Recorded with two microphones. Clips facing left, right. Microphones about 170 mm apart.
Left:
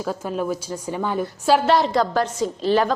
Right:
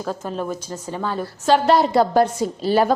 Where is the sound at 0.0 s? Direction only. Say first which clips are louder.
Left 1 dB; 10° left (ahead or behind).